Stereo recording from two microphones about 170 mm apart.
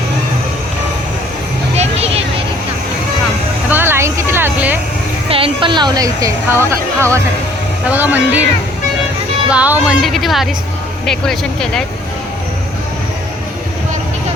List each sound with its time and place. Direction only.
1.7 s vehicle: 40° right (ahead or behind)
3.7 s a sound: 10° right (ahead or behind)
5.3 s a woman's voice: 30° right (ahead or behind); by 8.4 s 10° right (ahead or behind)
9.5 s speech: 10° right (ahead or behind)